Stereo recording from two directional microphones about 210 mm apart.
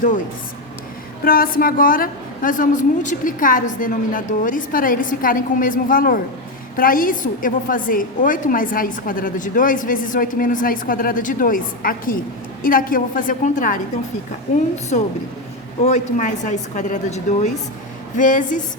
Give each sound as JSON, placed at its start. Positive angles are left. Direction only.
{"t": 1.2, "sound": "a woman's voice", "side_deg": 45}